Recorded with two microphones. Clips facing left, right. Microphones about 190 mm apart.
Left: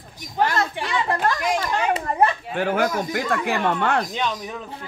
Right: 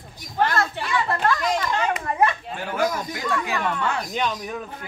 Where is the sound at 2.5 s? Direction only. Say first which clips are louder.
Left 3 dB; 65° left (ahead or behind).